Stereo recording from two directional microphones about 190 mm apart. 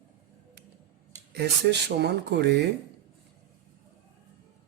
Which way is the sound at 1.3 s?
60° right (ahead or behind).